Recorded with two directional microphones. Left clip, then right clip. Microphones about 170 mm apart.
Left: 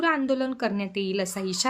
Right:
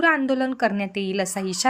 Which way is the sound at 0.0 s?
20° right (ahead or behind).